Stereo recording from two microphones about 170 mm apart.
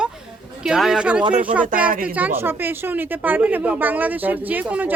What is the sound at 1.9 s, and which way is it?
Speech, 55° right (ahead or behind).